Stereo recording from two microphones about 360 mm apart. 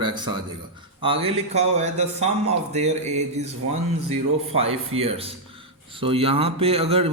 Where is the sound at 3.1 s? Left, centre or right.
Centre.